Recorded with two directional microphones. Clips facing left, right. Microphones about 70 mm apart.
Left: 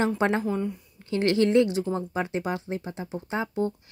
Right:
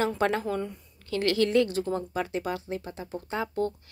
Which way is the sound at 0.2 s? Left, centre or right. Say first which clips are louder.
Left 2 dB; left.